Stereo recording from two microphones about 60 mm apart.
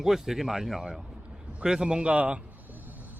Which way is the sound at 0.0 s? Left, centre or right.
Centre.